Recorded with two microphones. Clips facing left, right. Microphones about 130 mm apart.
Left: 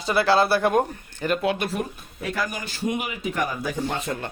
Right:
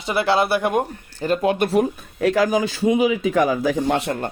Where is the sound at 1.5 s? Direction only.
65° right (ahead or behind); by 4.1 s 85° right.